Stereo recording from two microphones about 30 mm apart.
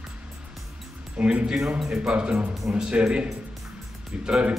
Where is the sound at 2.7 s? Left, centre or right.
Right.